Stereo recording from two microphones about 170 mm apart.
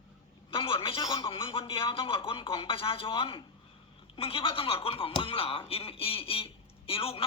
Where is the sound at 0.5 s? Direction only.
30° left (ahead or behind).